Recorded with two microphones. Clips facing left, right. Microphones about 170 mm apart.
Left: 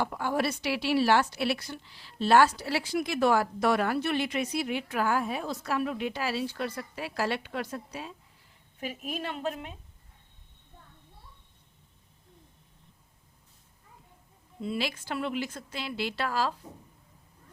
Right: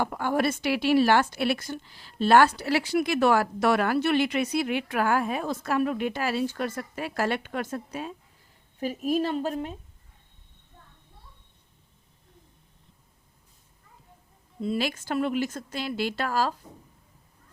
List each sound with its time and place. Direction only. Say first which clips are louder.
0.0 s a woman's voice: right 3 dB; 55° right (ahead or behind)
8.8 s speech: right 9 dB; 40° right (ahead or behind)
14.6 s a woman's voice: right 4 dB; 45° right (ahead or behind)